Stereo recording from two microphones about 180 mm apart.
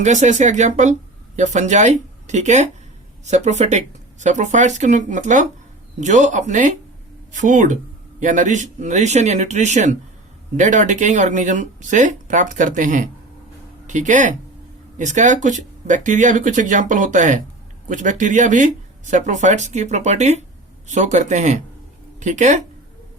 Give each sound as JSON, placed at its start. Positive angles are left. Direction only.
{"t": 0.0, "sound": "speech", "side_deg": -40}